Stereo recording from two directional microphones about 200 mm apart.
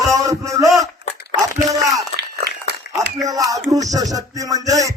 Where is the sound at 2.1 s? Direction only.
55° right (ahead or behind).